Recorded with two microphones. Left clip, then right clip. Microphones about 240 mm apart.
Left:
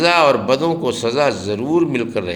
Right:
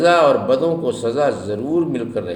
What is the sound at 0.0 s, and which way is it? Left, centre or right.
A man's voice, left.